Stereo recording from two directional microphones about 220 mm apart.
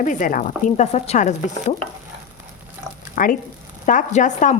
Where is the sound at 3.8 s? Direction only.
35° left (ahead or behind).